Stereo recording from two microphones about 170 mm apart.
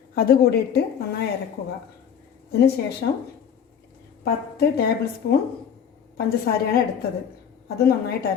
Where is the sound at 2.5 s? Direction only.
70° left (ahead or behind).